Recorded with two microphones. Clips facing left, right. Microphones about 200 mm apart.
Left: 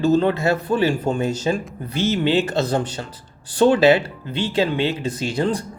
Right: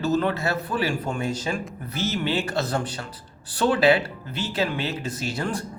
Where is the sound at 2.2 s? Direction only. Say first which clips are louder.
Left 6 dB; 25° left (ahead or behind).